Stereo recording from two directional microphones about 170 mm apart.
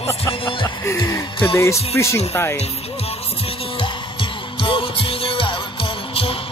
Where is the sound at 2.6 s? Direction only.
35° left (ahead or behind).